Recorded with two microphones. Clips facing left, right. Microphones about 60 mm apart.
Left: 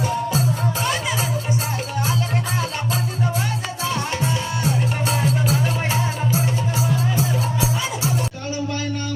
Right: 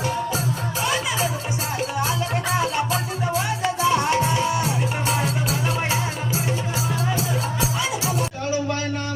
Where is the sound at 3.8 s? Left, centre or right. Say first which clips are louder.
Right 5 dB; right.